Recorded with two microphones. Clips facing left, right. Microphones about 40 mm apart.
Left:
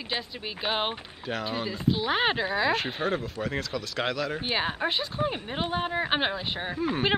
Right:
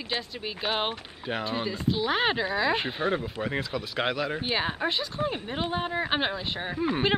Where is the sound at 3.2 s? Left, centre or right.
Centre.